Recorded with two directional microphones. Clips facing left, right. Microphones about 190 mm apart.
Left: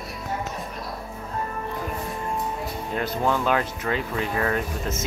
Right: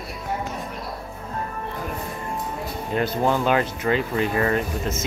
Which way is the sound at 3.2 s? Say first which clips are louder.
Right 1 dB; 30° right (ahead or behind).